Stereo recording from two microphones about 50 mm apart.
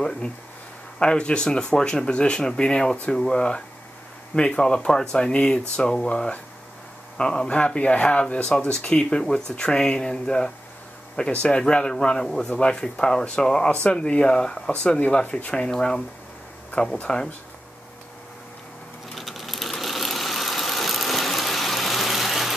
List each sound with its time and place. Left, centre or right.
0.9 s speech: left
13.8 s speech: left
19.1 s vehicle: centre